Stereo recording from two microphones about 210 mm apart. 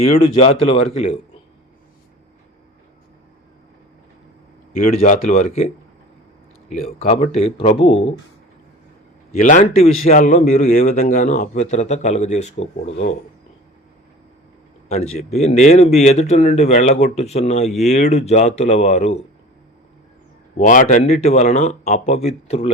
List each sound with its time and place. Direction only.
0.0 s speech: 30° left (ahead or behind)
4.8 s speech: 35° left (ahead or behind)
9.4 s speech: 35° left (ahead or behind)
14.8 s speech: 35° left (ahead or behind)
20.6 s speech: 40° left (ahead or behind)